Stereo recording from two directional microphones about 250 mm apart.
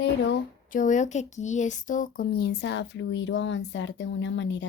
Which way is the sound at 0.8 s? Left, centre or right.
Left.